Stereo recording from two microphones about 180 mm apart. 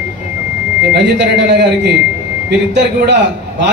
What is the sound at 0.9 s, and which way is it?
Speech, 75° right (ahead or behind).